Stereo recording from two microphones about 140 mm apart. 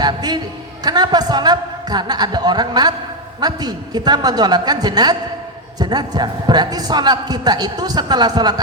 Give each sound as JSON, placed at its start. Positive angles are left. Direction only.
{"t": 0.0, "sound": "a man's voice", "side_deg": -30}